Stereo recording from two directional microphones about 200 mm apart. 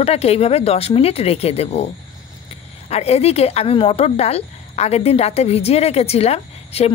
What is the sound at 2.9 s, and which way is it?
Speech, 30° left (ahead or behind).